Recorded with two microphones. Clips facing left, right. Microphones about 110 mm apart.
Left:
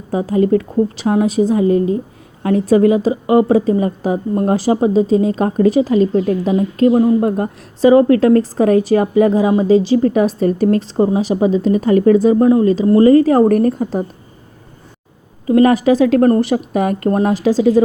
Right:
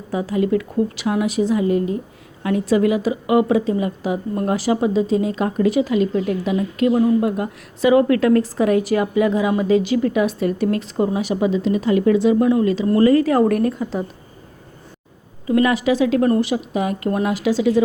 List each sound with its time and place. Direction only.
0.1 s a woman's voice: 35° left (ahead or behind)
15.4 s a woman's voice: 35° left (ahead or behind)